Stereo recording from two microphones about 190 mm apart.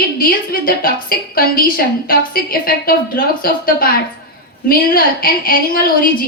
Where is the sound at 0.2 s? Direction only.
50° left (ahead or behind).